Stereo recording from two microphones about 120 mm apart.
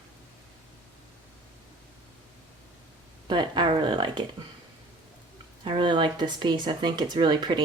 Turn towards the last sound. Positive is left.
turn(degrees=-40)  # may be behind; listen again after turning